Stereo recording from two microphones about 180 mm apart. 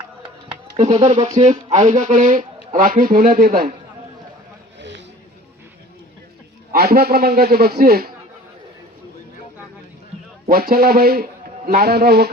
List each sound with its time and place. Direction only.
0.8 s speech: 40° right (ahead or behind)
4.8 s a sound: 80° right
6.7 s a man's voice: 60° right (ahead or behind)
10.5 s a man's voice: 55° right (ahead or behind)